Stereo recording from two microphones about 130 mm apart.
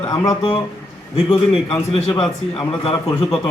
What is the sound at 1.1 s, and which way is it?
Speech, 50° left (ahead or behind).